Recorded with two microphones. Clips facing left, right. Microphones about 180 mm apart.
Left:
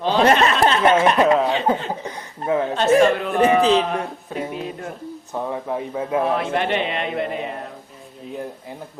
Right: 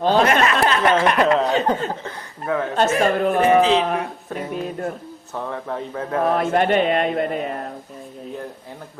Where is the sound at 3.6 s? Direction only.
40° left (ahead or behind).